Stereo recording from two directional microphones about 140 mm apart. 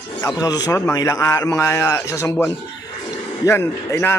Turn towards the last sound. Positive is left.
turn(degrees=20)  # may be behind; listen again after turning